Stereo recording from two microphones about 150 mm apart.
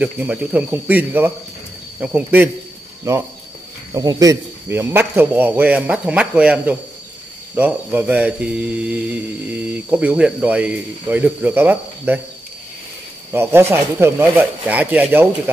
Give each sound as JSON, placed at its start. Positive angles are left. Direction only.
{"t": 0.0, "sound": "speech", "side_deg": -10}
{"t": 13.3, "sound": "speech", "side_deg": -15}